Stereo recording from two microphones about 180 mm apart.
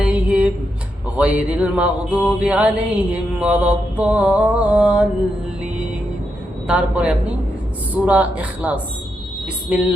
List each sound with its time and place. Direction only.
0.0 s music: 5° right (ahead or behind)
6.7 s music: 5° right (ahead or behind)
9.6 s a sound: 10° right (ahead or behind)